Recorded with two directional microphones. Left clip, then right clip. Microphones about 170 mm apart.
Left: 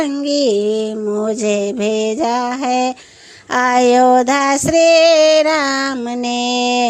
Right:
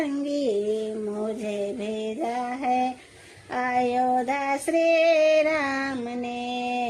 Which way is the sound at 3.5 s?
35° left (ahead or behind).